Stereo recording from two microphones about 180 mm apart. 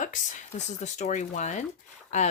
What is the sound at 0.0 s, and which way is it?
Speech, 45° left (ahead or behind).